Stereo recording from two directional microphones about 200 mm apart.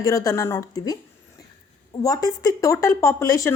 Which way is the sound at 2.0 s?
20° left (ahead or behind).